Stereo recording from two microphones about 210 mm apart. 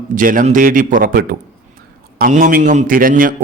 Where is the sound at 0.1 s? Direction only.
40° right (ahead or behind).